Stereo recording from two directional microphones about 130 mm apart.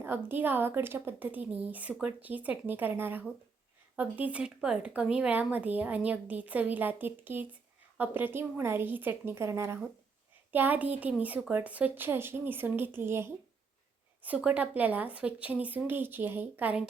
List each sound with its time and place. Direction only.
0.3 s speech: 15° right (ahead or behind)